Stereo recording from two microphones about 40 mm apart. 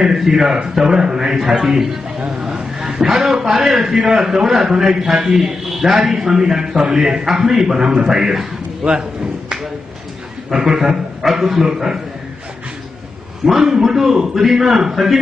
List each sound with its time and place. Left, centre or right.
0.0 s a man's voice: centre
1.5 s a man's voice: right
2.4 s a man's voice: centre
7.9 s a man's voice: right
8.8 s speech: right
10.5 s a man's voice: centre
13.5 s a man's voice: centre